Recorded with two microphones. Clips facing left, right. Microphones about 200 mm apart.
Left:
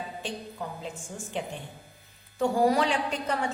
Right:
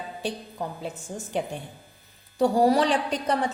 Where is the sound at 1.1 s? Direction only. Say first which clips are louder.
Right 4 dB; 35° right (ahead or behind).